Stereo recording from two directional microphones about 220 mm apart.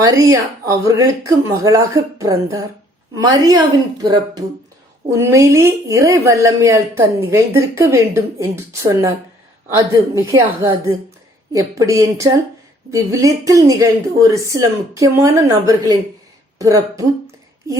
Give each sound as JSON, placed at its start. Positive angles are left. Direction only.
{"t": 0.0, "sound": "speech", "side_deg": -15}